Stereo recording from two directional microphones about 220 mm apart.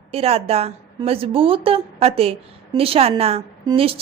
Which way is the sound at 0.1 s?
25° right (ahead or behind).